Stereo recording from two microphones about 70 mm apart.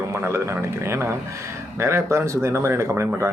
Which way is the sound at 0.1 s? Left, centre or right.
Right.